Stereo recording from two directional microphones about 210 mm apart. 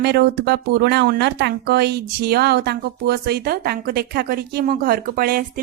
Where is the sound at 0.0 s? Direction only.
50° right (ahead or behind).